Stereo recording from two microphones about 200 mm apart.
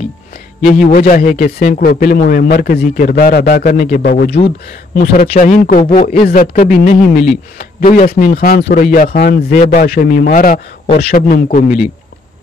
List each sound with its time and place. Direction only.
0.7 s a man's voice: 45° left (ahead or behind)
4.9 s a man's voice: 35° left (ahead or behind)